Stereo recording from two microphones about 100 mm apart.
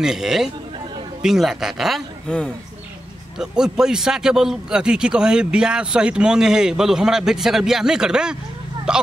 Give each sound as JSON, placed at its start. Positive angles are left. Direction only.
{"t": 0.0, "sound": "a man's voice", "side_deg": -5}
{"t": 2.2, "sound": "speech", "side_deg": 10}
{"t": 3.3, "sound": "a man's voice", "side_deg": -5}